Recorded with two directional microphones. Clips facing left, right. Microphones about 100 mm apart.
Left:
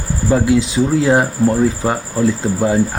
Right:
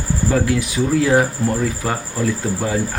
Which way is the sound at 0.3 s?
20° left (ahead or behind).